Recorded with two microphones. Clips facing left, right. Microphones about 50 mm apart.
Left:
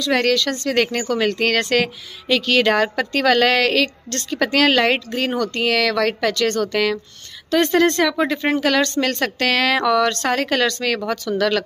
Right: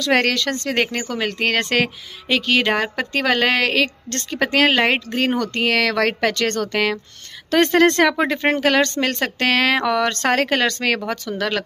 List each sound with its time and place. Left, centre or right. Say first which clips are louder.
0.1 s speech: even; right
0.9 s speech: left 4 dB; centre
1.4 s speech: left 1 dB; right
8.2 s speech: even; right
11.1 s speech: left 4 dB; right